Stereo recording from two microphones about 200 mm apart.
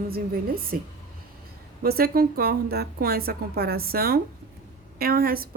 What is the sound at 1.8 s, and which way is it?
A woman's voice, 50° right (ahead or behind).